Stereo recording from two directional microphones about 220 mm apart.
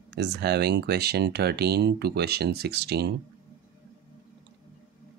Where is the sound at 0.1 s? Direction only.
50° right (ahead or behind).